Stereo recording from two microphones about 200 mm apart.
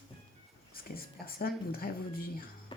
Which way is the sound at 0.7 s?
50° left (ahead or behind).